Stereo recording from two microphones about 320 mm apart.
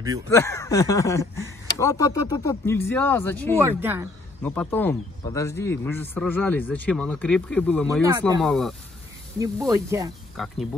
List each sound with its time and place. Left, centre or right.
0.3 s speech: centre
3.5 s speech: centre
4.4 s a man's voice: centre
8.0 s speech: centre
8.4 s a man's voice: centre
9.4 s speech: centre
10.3 s a man's voice: centre